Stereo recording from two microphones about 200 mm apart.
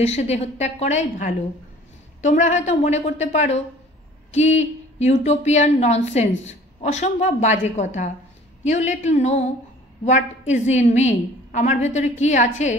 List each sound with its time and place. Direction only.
0.0 s a woman's voice: 35° left (ahead or behind)